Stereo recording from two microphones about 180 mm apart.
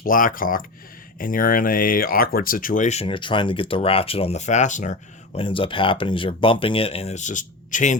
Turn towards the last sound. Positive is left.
turn(degrees=45)  # may be behind; listen again after turning